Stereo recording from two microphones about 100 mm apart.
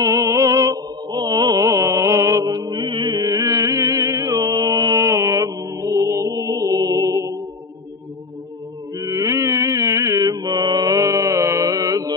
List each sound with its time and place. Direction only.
0.0 s music: 35° right (ahead or behind)
2.7 s music: 55° right (ahead or behind); by 4.4 s 35° right (ahead or behind)
4.6 s mantra: 40° right (ahead or behind)
8.9 s mantra: 35° right (ahead or behind)